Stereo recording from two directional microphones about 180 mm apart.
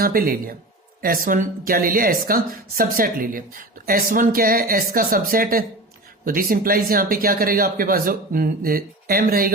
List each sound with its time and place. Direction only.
0.0 s a woman's voice: 55° right (ahead or behind)